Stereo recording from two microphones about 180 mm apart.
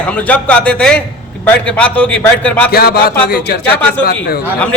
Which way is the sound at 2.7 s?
60° left (ahead or behind).